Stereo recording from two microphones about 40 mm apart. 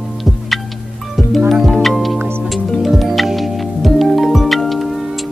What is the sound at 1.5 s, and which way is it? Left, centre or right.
Music, centre.